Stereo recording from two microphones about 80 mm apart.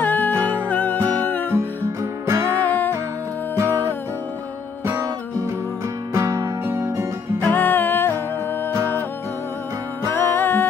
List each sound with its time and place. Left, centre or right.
0.0 s music: left
2.2 s music: right
2.6 s music: left
3.5 s music: right
4.8 s music: right
6.1 s music: right
7.5 s music: left
10.1 s music: left